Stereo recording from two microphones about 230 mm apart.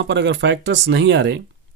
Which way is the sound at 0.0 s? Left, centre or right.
Right.